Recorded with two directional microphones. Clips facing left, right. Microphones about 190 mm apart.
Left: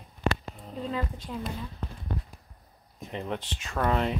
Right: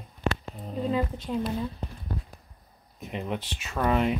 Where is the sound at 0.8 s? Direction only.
15° right (ahead or behind).